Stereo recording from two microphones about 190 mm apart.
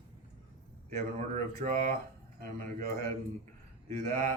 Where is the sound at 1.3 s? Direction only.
45° right (ahead or behind).